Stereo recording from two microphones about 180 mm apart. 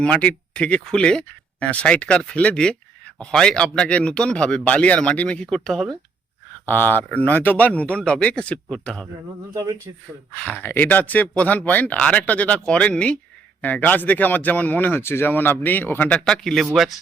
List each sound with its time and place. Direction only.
0.0 s speech: 5° left (ahead or behind)
9.6 s speech: 20° right (ahead or behind)
10.3 s speech: 10° left (ahead or behind)